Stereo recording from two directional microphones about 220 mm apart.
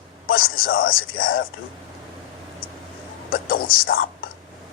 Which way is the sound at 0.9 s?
65° left (ahead or behind).